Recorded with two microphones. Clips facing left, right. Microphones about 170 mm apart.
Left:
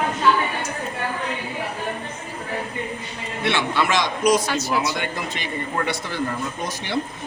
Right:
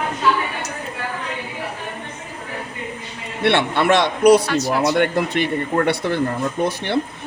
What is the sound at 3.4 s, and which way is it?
A man's voice, 60° right (ahead or behind).